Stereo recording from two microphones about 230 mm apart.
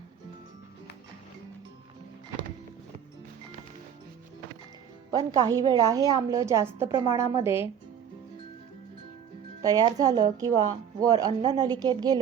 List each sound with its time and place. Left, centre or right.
5.1 s a woman's voice: centre
9.6 s a woman's voice: centre